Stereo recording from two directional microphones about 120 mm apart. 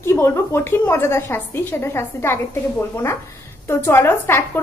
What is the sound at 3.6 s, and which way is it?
Speech, 20° left (ahead or behind).